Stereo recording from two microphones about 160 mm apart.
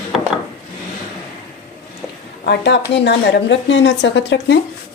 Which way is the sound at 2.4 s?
90° left.